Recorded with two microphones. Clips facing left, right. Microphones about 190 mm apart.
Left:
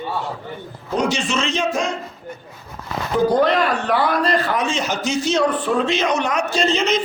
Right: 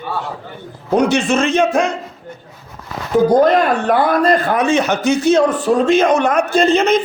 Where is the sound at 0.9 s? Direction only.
60° right (ahead or behind).